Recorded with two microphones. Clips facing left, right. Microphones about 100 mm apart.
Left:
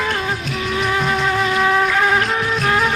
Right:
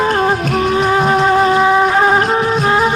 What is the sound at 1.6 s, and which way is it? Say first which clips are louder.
Music: right 5 dB; 25° right (ahead or behind).